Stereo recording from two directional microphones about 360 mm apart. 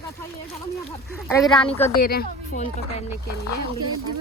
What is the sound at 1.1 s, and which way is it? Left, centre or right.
Speech, centre.